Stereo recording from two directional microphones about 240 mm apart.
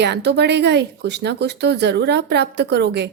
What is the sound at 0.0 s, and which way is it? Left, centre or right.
Speech, right.